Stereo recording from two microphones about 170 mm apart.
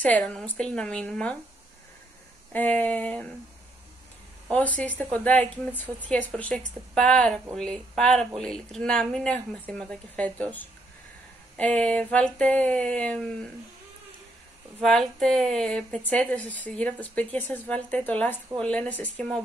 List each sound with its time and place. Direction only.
0.0 s a woman's voice: 10° left (ahead or behind)
2.5 s a woman's voice: 10° left (ahead or behind)
4.5 s a woman's voice: 10° left (ahead or behind)
14.8 s a woman's voice: 5° left (ahead or behind)